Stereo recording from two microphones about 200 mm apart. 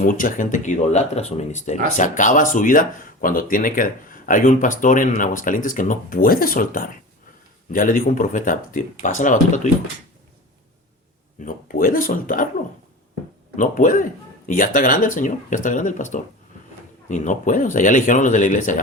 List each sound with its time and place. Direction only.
0.0 s speech: 45° left (ahead or behind)
11.3 s speech: 45° left (ahead or behind)
13.6 s speech: 40° left (ahead or behind)